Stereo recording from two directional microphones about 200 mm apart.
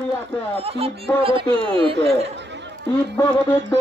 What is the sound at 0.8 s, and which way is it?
Speech, 25° right (ahead or behind).